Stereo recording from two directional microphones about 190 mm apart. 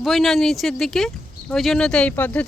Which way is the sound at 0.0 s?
Centre (ahead or behind).